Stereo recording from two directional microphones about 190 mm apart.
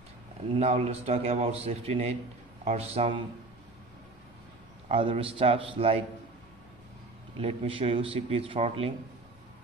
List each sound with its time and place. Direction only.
0.6 s a man's voice: 35° right (ahead or behind)
4.8 s a man's voice: 30° right (ahead or behind)
7.3 s speech: 30° right (ahead or behind)